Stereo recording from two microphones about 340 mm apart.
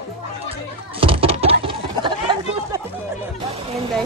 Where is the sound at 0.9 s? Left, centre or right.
Centre.